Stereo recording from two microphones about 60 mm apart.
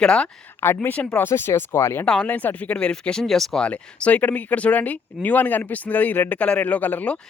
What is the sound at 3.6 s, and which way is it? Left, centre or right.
Speech, left.